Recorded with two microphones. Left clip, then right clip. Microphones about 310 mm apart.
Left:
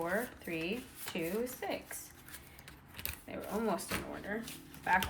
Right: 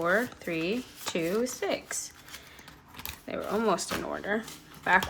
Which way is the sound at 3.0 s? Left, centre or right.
Centre.